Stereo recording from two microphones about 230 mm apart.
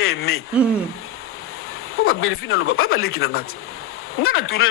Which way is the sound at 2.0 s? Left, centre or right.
Left.